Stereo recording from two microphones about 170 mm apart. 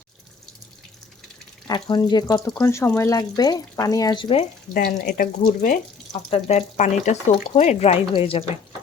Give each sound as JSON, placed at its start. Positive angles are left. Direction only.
{"t": 1.6, "sound": "speech", "side_deg": 25}
{"t": 4.7, "sound": "speech", "side_deg": 60}
{"t": 6.3, "sound": "speech", "side_deg": 40}